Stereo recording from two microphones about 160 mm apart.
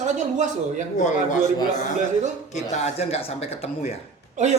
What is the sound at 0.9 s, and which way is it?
Speech, 50° left (ahead or behind).